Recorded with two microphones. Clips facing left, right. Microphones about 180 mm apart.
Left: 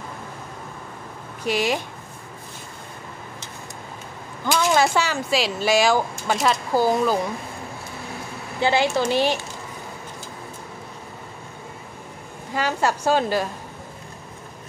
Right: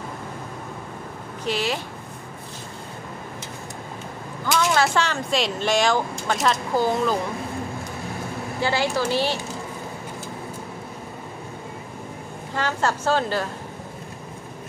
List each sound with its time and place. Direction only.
1.4 s speech: 15° left (ahead or behind)
4.7 s speech: 10° left (ahead or behind)
8.5 s a woman's voice: 20° left (ahead or behind)
12.5 s speech: 10° left (ahead or behind)